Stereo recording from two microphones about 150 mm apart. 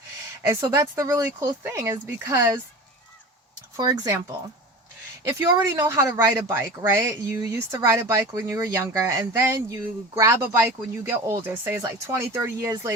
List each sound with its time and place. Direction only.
0.4 s speech: 20° right (ahead or behind)
3.8 s speech: 20° right (ahead or behind)